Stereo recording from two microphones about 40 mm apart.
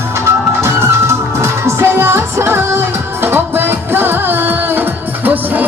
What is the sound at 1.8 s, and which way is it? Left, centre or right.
Music, right.